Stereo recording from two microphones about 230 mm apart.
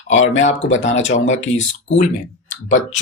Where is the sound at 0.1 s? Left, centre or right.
Left.